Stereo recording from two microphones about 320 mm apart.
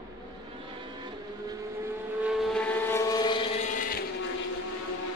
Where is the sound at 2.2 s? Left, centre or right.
Centre.